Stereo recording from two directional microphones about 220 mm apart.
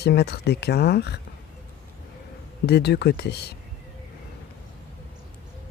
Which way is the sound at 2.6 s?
50° left (ahead or behind).